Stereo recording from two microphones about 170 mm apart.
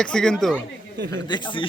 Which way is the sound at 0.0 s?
5° left (ahead or behind).